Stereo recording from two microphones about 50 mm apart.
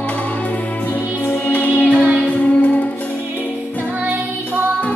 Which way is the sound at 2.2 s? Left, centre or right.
Left.